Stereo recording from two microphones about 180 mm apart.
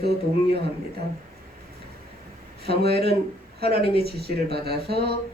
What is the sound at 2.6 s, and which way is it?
Speech, 65° right (ahead or behind).